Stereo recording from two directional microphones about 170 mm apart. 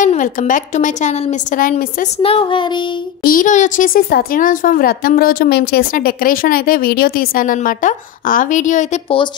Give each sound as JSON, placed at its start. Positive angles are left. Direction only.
{"t": 0.0, "sound": "a woman's voice", "side_deg": 50}
{"t": 2.2, "sound": "speech", "side_deg": 30}
{"t": 3.3, "sound": "a woman's voice", "side_deg": 50}